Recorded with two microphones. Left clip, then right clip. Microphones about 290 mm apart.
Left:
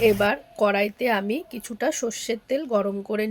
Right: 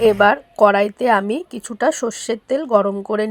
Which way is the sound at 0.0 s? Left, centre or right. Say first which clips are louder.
Right 7 dB; right.